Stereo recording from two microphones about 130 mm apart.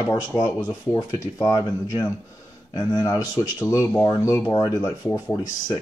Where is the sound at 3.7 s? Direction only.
20° left (ahead or behind).